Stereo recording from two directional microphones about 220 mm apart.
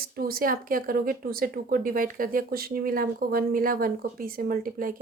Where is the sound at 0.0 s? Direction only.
40° right (ahead or behind).